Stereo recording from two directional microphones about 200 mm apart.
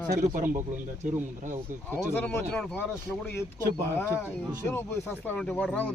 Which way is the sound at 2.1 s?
10° left (ahead or behind).